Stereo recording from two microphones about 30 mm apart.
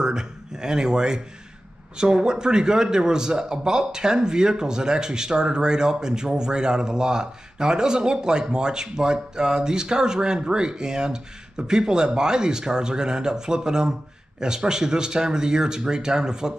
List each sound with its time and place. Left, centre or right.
0.0 s a man's voice: right